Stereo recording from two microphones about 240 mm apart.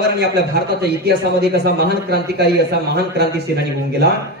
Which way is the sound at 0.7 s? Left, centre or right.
Right.